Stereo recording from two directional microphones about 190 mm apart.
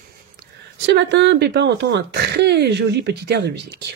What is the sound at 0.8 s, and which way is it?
Speech, 65° right (ahead or behind).